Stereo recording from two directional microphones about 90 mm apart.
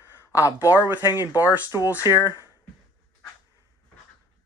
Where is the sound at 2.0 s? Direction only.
55° left (ahead or behind).